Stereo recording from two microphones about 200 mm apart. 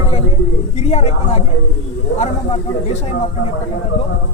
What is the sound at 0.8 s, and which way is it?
A man's voice, 30° left (ahead or behind).